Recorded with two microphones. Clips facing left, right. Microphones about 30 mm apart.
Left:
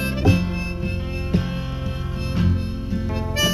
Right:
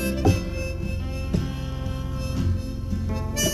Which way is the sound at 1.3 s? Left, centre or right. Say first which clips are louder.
Left 4 dB; left.